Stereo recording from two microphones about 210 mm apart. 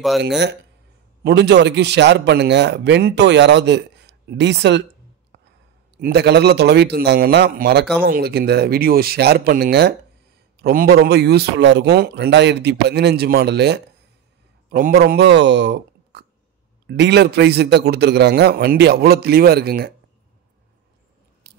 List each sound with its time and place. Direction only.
1.2 s a man's voice: 50° right (ahead or behind)
5.9 s speech: 50° right (ahead or behind)